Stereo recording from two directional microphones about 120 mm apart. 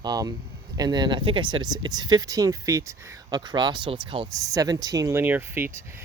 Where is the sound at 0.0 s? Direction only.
35° right (ahead or behind).